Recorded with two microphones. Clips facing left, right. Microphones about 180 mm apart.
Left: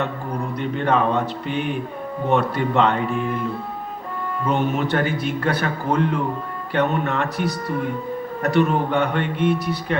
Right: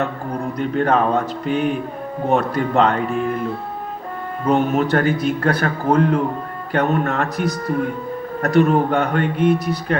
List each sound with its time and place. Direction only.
0.6 s a man's voice: 40° right (ahead or behind)
4.4 s a man's voice: 40° right (ahead or behind)